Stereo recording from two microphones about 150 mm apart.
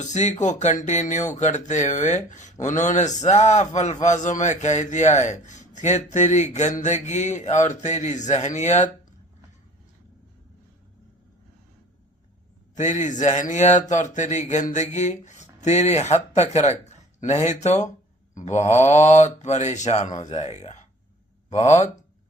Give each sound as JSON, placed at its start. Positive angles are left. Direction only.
{"t": 0.0, "sound": "speech", "side_deg": 50}
{"t": 12.7, "sound": "speech", "side_deg": 55}